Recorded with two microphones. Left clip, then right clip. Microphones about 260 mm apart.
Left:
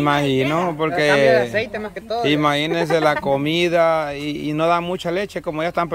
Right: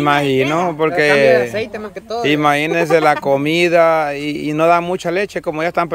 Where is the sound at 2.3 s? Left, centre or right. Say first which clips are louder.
Right 5 dB; centre.